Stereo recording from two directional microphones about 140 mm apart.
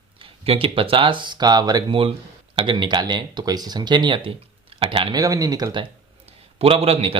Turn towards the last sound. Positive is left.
turn(degrees=-45)  # may be behind; listen again after turning